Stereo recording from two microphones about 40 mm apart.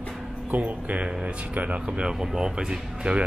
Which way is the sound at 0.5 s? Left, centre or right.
Right.